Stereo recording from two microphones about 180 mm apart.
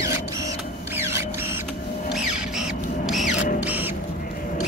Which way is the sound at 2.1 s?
Centre (ahead or behind).